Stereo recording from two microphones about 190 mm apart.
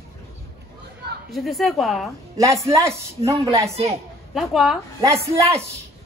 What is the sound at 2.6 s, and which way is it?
Speech, 15° right (ahead or behind).